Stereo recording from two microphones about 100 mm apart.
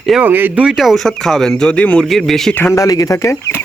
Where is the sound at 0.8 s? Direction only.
Centre (ahead or behind).